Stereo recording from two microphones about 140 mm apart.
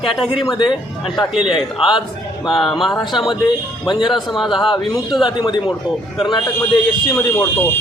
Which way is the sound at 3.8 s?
35° left (ahead or behind).